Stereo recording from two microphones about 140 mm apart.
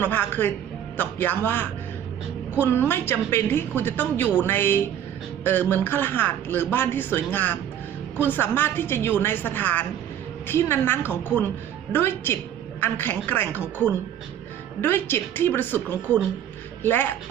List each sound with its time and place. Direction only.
0.0 s a woman's voice: 15° left (ahead or behind)
5.4 s music: 15° left (ahead or behind)
5.7 s a woman's voice: 15° left (ahead or behind)
14.8 s a woman's voice: 15° left (ahead or behind)
16.8 s a woman's voice: 15° left (ahead or behind)